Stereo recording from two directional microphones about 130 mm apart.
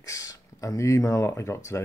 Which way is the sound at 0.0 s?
25° left (ahead or behind).